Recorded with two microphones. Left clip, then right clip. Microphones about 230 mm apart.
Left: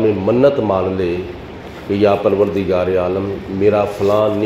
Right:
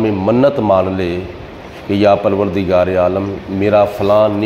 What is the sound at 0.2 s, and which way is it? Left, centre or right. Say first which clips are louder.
A man's voice: right 1 dB; right.